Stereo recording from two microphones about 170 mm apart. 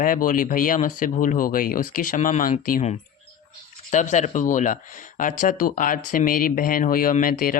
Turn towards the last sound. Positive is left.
turn(degrees=55)  # may be behind; listen again after turning